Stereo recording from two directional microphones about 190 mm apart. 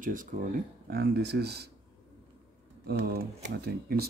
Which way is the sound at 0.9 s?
55° right (ahead or behind).